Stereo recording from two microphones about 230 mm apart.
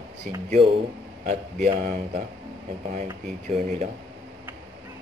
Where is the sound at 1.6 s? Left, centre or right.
Right.